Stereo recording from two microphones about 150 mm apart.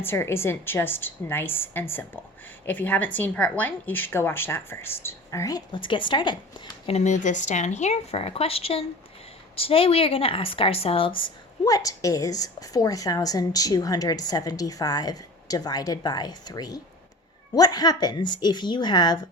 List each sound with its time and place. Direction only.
0.0 s speech: 15° left (ahead or behind); by 6.3 s 30° left (ahead or behind)
6.8 s speech: 50° left (ahead or behind); by 19.2 s 30° left (ahead or behind)